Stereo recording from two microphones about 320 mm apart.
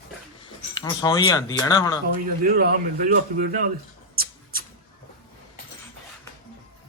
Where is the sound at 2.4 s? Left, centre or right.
Right.